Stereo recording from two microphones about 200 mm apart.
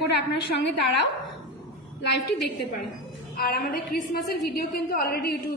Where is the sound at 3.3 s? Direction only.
50° left (ahead or behind).